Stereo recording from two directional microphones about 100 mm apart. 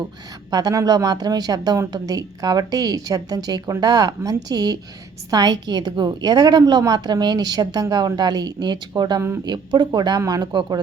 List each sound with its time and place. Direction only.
0.5 s a woman's voice: 35° right (ahead or behind)